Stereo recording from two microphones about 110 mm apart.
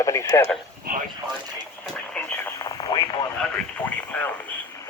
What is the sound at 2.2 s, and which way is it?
Radio, 10° left (ahead or behind).